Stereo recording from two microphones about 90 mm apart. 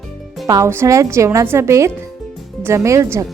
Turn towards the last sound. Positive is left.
turn(degrees=-35)  # may be behind; listen again after turning